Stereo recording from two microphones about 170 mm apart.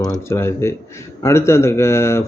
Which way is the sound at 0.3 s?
15° left (ahead or behind).